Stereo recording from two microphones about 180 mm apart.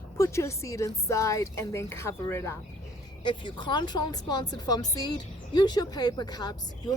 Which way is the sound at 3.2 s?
25° left (ahead or behind).